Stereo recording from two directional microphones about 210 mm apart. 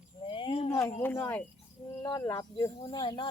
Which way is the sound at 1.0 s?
10° left (ahead or behind).